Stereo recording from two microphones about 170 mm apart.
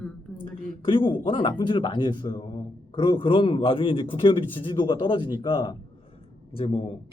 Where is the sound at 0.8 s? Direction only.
30° left (ahead or behind).